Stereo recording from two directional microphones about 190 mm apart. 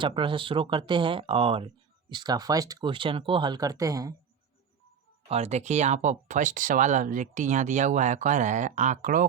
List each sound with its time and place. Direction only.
0.0 s speech: 25° right (ahead or behind)
5.3 s speech: 35° right (ahead or behind)